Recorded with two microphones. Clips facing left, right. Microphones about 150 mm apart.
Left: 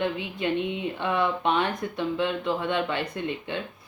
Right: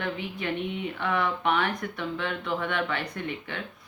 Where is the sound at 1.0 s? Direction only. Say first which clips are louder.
Left 2 dB; 20° left (ahead or behind).